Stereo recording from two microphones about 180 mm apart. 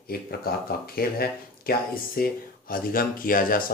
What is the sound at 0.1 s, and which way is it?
Speech, 55° left (ahead or behind).